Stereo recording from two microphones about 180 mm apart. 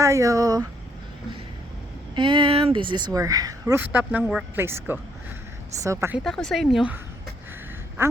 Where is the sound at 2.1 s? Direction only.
25° right (ahead or behind).